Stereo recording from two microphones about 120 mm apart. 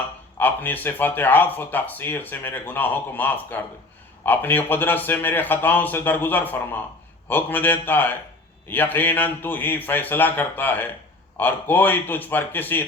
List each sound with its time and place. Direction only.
0.3 s speech: 15° left (ahead or behind)